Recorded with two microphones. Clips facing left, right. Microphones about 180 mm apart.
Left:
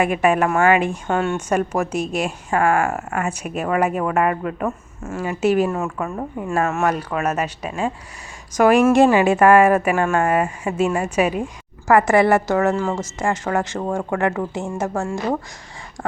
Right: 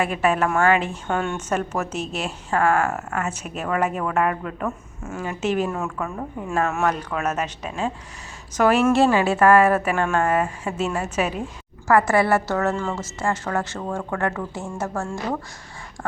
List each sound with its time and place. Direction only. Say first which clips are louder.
0.0 s a woman's voice: left 4 dB; 15° left (ahead or behind)